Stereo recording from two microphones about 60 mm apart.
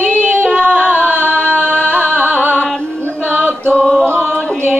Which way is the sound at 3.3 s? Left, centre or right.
Right.